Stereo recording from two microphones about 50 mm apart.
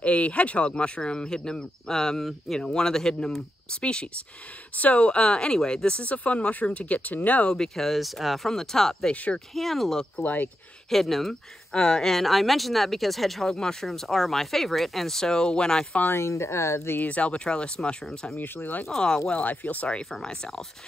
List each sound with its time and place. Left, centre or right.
0.0 s speech: left
7.4 s speech: centre
9.1 s speech: left
9.5 s speech: centre
10.2 s speech: left
10.9 s speech: centre
16.1 s speech: left
17.0 s speech: left
18.3 s speech: left
18.9 s speech: centre
19.4 s speech: left
20.1 s speech: centre